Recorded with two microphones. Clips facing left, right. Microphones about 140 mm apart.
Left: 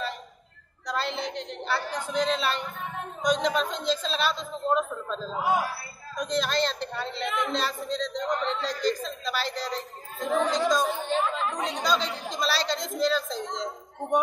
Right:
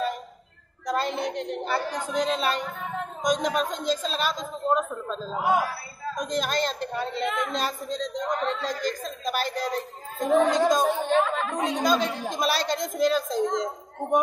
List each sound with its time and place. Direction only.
0.8 s a man's voice: 50° right (ahead or behind)
6.1 s a man's voice: 45° right (ahead or behind)